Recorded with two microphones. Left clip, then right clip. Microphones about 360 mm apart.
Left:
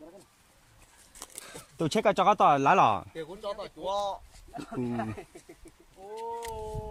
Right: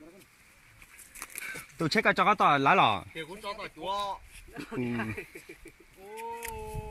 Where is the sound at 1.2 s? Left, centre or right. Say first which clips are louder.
Right 6 dB; centre.